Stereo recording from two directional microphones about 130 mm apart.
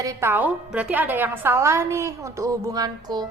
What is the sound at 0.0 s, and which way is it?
A woman's voice, 20° right (ahead or behind).